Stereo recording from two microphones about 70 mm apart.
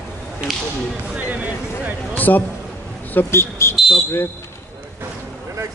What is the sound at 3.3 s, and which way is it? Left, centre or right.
Speech, left.